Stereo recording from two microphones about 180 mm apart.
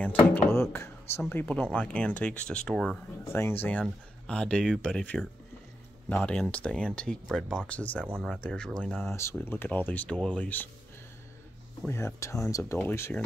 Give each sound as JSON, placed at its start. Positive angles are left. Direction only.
{"t": 0.3, "sound": "speech", "side_deg": 15}
{"t": 9.1, "sound": "speech", "side_deg": 15}
{"t": 11.9, "sound": "speech", "side_deg": 15}